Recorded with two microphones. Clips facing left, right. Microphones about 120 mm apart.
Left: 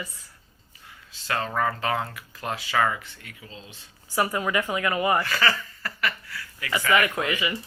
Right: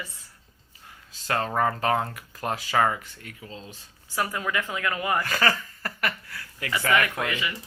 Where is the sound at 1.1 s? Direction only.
40° right (ahead or behind).